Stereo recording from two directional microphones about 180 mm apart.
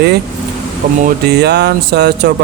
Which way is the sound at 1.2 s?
65° right (ahead or behind).